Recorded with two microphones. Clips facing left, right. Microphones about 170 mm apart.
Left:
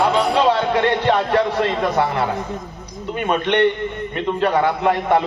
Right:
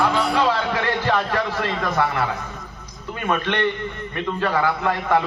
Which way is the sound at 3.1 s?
20° left (ahead or behind).